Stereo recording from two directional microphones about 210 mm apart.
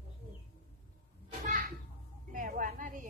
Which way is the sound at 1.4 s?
35° right (ahead or behind).